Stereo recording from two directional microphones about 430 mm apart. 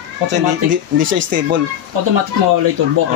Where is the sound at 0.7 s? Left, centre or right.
Right.